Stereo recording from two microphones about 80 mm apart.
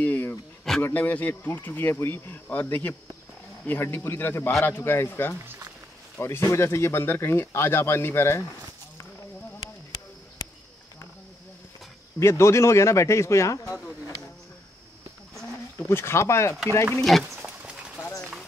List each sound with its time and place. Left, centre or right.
0.0 s a sound: left
0.9 s speech: left
12.2 s speech: left
15.9 s speech: left
17.4 s livestock: centre